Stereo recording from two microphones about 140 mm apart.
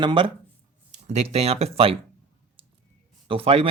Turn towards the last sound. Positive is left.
turn(degrees=-40)  # may be behind; listen again after turning